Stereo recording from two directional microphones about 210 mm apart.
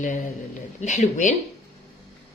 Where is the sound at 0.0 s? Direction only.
35° left (ahead or behind).